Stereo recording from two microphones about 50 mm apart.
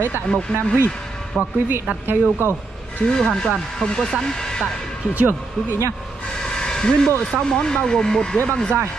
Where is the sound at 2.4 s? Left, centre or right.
Right.